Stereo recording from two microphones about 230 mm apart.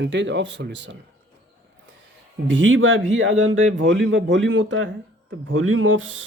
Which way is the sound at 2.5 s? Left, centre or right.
Right.